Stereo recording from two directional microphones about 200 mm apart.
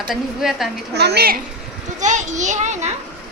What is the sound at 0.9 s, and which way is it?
Speech, 55° right (ahead or behind).